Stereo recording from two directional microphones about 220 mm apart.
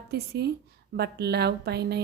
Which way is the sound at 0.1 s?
50° right (ahead or behind).